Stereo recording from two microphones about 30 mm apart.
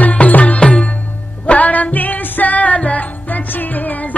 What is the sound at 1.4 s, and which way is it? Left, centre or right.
Music, left.